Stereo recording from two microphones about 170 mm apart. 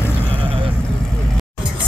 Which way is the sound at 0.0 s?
10° left (ahead or behind).